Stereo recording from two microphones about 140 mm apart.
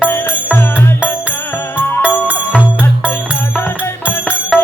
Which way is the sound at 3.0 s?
15° left (ahead or behind).